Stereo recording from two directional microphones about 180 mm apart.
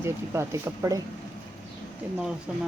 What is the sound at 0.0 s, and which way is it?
Speech, 15° right (ahead or behind).